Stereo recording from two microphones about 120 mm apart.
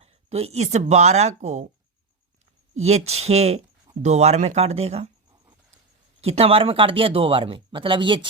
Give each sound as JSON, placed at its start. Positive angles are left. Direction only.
{"t": 0.0, "sound": "speech", "side_deg": -60}
{"t": 2.7, "sound": "speech", "side_deg": -65}
{"t": 6.2, "sound": "speech", "side_deg": -55}